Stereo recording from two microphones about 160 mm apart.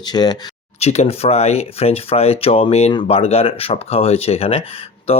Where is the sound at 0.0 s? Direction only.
25° left (ahead or behind).